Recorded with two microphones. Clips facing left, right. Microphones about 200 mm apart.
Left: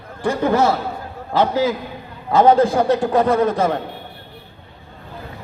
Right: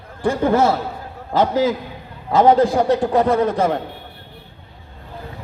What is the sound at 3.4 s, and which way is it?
Speech, 30° right (ahead or behind).